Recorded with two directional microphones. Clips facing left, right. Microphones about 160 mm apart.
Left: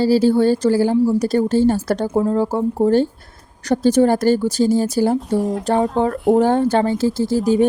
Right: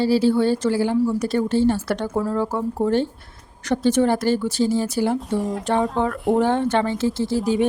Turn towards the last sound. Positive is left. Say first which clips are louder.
# left 4 dB
turn(degrees=40)  # may be behind; listen again after turning